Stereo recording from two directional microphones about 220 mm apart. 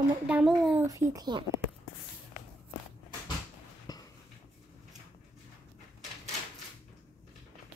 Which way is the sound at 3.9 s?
15° left (ahead or behind).